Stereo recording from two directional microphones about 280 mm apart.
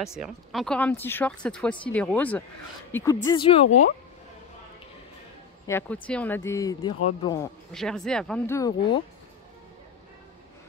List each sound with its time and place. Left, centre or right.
0.2 s speech: centre
5.7 s speech: centre
7.7 s speech: centre